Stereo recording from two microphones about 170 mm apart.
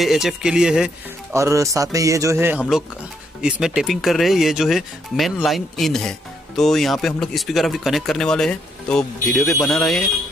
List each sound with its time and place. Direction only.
0.0 s speech: centre (ahead or behind)
1.3 s speech: 15° right (ahead or behind); by 10.0 s 5° left (ahead or behind)